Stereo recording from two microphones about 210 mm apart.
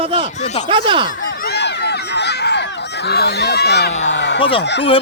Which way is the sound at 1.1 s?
45° left (ahead or behind).